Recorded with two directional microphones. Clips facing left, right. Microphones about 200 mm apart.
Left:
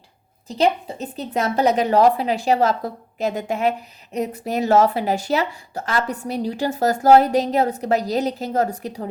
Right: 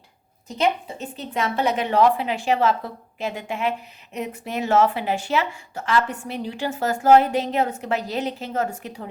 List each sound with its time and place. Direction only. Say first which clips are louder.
0.4 s a woman's voice: left 3 dB; 35° left (ahead or behind)